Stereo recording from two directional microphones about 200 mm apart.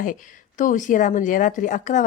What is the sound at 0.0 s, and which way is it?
Speech, 40° left (ahead or behind).